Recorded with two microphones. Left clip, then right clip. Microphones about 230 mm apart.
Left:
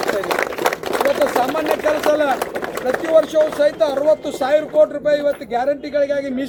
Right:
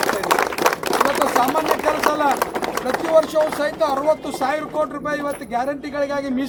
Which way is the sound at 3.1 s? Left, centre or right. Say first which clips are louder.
Left 2 dB; centre.